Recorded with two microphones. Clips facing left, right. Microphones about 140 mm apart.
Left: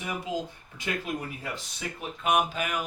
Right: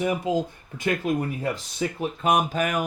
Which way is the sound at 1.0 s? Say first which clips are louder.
Right 9 dB; 45° right (ahead or behind).